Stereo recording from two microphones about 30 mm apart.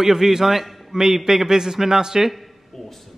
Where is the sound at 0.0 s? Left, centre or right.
Centre.